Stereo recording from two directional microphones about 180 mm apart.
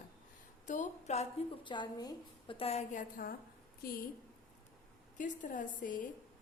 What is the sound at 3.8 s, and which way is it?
Speech, 55° left (ahead or behind).